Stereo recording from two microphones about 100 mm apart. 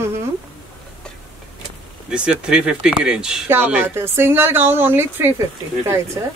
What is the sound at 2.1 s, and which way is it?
Speech, 10° right (ahead or behind).